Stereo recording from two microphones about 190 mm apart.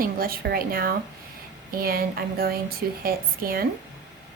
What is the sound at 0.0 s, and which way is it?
A woman's voice, 50° right (ahead or behind).